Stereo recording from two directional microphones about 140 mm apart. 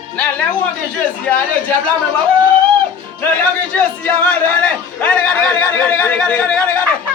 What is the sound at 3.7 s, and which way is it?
Speech, 10° left (ahead or behind).